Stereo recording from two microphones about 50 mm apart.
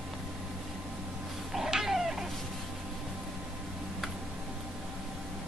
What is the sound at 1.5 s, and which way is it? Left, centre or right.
Cat, centre.